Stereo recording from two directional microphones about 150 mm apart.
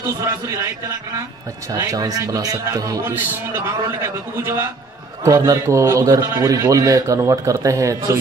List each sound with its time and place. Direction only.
0.2 s a man's voice: 20° right (ahead or behind)